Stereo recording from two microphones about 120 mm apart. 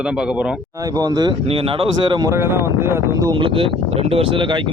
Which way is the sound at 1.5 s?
50° right (ahead or behind).